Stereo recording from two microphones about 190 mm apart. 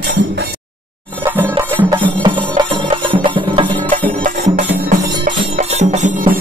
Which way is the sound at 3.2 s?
25° right (ahead or behind).